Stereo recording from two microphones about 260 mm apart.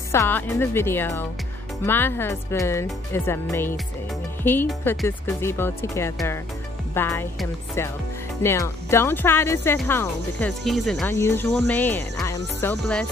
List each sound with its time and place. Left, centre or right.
0.1 s speech: centre